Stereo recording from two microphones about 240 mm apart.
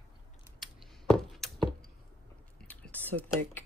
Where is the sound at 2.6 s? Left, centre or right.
Centre.